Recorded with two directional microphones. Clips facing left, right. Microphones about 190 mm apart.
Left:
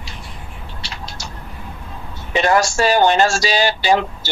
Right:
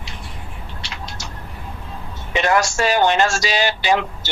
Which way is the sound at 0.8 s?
35° left (ahead or behind).